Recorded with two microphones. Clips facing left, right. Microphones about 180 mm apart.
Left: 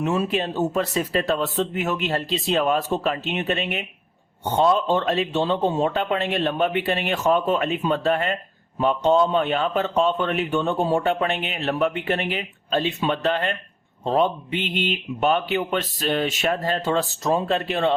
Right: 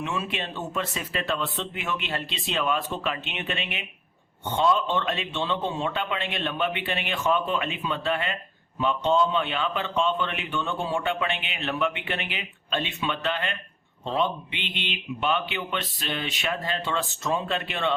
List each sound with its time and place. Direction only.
0.0 s a man's voice: 40° left (ahead or behind)